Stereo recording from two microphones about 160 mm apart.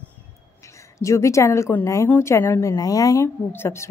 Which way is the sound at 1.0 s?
20° left (ahead or behind).